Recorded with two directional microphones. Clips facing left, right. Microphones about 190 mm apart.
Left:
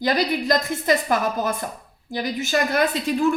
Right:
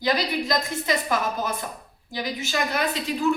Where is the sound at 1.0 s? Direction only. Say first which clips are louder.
Left 4 dB; 50° left (ahead or behind).